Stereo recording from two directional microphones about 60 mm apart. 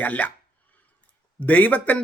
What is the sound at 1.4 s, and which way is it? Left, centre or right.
Speech, left.